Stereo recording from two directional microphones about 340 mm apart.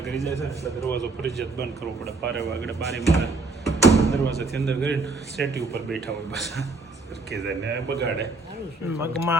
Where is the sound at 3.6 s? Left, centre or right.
Centre.